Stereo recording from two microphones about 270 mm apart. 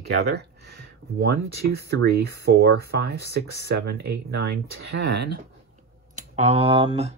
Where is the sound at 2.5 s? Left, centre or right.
Right.